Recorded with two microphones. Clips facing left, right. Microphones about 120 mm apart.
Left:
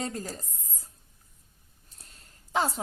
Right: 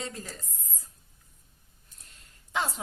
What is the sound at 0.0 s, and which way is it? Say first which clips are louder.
Speech: left 5 dB; 40° left (ahead or behind).